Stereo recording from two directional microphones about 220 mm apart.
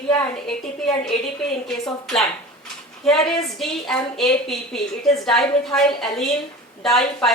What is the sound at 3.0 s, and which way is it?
A woman's voice, centre (ahead or behind).